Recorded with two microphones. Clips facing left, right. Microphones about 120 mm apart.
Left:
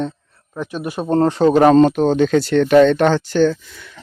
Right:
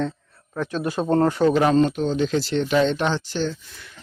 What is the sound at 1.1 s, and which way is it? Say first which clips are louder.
Speech: left 4 dB; 25° left (ahead or behind).